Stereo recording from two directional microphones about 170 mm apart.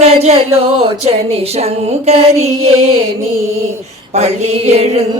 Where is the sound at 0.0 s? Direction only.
40° right (ahead or behind).